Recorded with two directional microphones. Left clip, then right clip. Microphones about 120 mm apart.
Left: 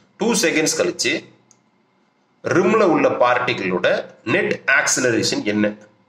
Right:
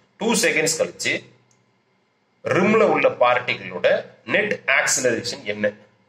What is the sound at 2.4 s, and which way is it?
A man's voice, 50° left (ahead or behind).